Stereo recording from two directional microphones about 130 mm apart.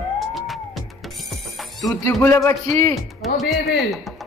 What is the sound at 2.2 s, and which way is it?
Speech, 20° left (ahead or behind).